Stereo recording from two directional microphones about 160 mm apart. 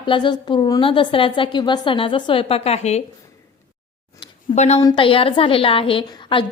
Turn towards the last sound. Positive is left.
turn(degrees=35)  # may be behind; listen again after turning